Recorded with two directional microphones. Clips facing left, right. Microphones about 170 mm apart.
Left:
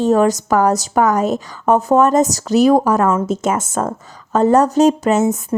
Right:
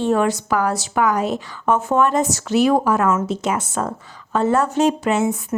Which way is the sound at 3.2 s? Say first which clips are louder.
Left 4 dB; 45° left (ahead or behind).